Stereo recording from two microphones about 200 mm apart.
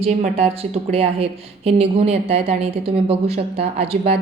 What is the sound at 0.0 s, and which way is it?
A woman's voice, 30° right (ahead or behind).